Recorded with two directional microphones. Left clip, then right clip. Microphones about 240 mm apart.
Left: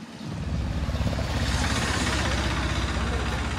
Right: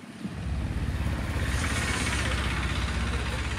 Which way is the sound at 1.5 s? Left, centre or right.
Left.